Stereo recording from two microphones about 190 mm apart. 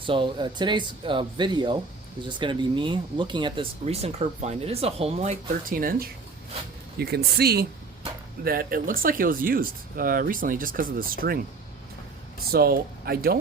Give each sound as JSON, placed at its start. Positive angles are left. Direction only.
{"t": 0.0, "sound": "speech", "side_deg": -25}
{"t": 12.5, "sound": "speech", "side_deg": -55}